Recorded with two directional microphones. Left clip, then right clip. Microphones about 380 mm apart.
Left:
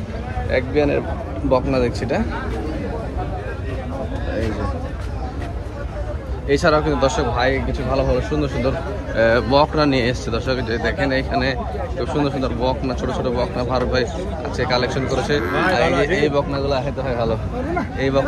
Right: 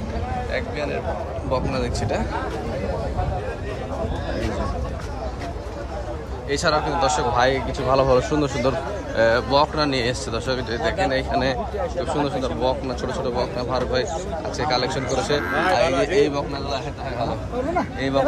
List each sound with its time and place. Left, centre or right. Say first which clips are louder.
0.5 s speech: left 11 dB; centre
6.5 s speech: left 4 dB; centre
15.8 s speech: left 2 dB; centre
16.2 s speech: left 2 dB; centre